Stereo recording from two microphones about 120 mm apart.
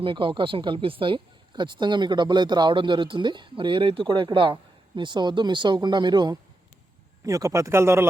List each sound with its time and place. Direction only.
0.0 s speech: 45° right (ahead or behind); by 8.0 s 20° right (ahead or behind)